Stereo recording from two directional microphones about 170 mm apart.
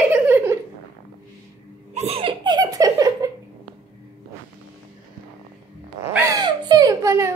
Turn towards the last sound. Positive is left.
turn(degrees=-15)  # may be behind; listen again after turning